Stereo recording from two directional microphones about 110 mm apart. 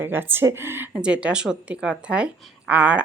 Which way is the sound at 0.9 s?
10° right (ahead or behind).